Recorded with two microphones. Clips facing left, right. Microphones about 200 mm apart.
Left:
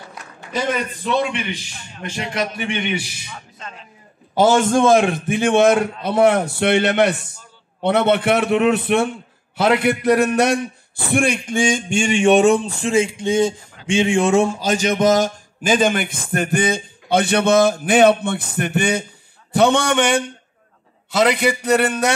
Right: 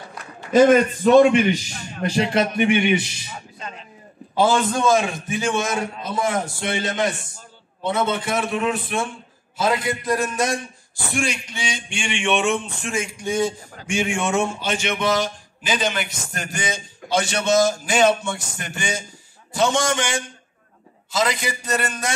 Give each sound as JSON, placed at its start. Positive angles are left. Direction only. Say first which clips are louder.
{"t": 0.5, "sound": "a man's voice", "louder": "right 9 dB", "side_deg": -45}
{"t": 2.5, "sound": "a man's voice", "louder": "right 7 dB", "side_deg": -15}
{"t": 2.8, "sound": "a man's voice", "louder": "right 4 dB", "side_deg": 0}
{"t": 4.4, "sound": "a man's voice", "louder": "left 4 dB", "side_deg": 45}
{"t": 4.7, "sound": "a sound", "louder": "left 5 dB", "side_deg": 60}
{"t": 9.6, "sound": "a man's voice", "louder": "left 5 dB", "side_deg": 65}
{"t": 13.8, "sound": "a sound", "louder": "left 7 dB", "side_deg": 30}